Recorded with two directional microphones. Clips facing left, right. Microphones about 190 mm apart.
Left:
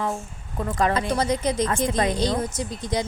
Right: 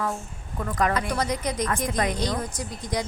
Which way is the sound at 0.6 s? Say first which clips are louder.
Left 2 dB; 25° left (ahead or behind).